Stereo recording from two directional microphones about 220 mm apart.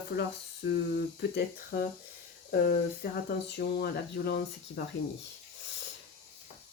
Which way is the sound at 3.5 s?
45° left (ahead or behind).